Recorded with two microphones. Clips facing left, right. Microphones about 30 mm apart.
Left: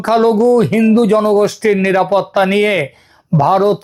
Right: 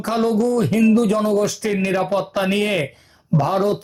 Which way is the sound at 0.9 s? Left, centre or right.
Left.